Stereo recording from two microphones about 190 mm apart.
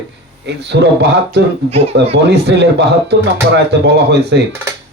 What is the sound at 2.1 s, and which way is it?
Speech, 65° right (ahead or behind).